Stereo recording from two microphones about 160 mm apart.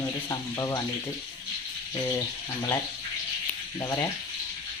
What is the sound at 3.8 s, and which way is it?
Speech, 25° left (ahead or behind).